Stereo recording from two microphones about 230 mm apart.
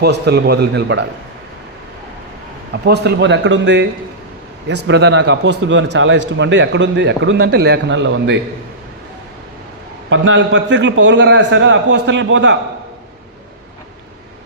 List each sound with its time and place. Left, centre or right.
0.0 s a man's voice: right
2.8 s a man's voice: right
10.1 s a man's voice: right